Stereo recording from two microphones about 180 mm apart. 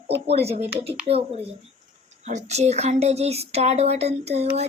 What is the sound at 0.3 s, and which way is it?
Speech, 35° right (ahead or behind).